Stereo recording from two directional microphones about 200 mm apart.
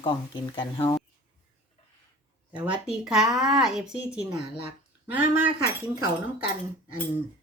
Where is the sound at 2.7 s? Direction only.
5° right (ahead or behind).